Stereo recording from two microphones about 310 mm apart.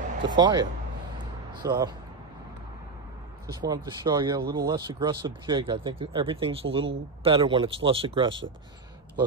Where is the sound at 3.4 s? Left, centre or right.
Centre.